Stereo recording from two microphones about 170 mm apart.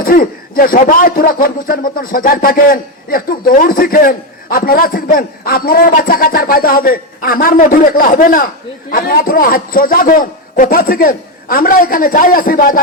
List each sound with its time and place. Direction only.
0.0 s a man's voice: 55° left (ahead or behind)